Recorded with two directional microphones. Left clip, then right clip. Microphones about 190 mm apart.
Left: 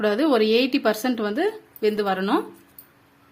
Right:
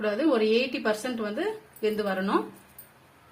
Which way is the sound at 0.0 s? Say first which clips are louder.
Left 5 dB; 60° left (ahead or behind).